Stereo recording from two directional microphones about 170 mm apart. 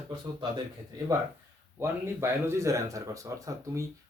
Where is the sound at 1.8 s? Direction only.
15° right (ahead or behind).